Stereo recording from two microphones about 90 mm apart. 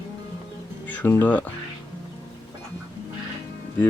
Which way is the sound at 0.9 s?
20° left (ahead or behind).